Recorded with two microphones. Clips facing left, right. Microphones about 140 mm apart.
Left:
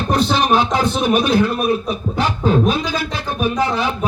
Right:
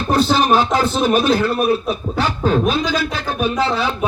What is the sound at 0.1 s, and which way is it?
A man's voice, 20° left (ahead or behind).